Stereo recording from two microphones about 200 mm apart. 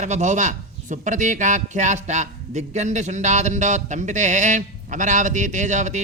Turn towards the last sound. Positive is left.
turn(degrees=-35)  # may be behind; listen again after turning